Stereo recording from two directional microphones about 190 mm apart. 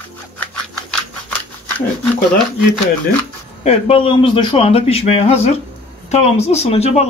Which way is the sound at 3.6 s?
30° left (ahead or behind).